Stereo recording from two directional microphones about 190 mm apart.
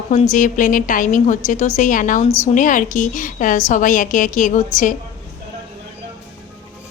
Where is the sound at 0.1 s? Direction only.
40° left (ahead or behind).